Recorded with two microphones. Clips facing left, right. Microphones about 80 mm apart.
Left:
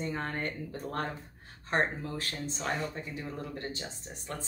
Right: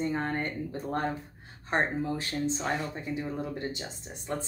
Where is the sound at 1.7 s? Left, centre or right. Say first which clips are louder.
Right 2 dB; right.